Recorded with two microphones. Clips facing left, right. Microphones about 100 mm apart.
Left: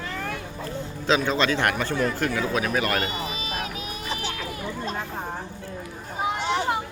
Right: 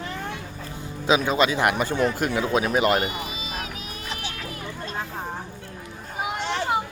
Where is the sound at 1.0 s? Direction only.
10° right (ahead or behind).